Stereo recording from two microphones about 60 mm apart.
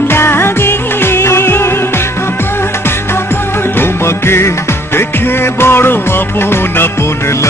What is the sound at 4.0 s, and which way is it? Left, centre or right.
Music, left.